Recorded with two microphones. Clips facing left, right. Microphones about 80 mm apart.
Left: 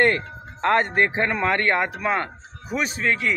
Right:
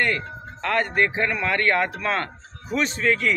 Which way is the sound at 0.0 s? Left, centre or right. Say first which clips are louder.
Left 4 dB; left.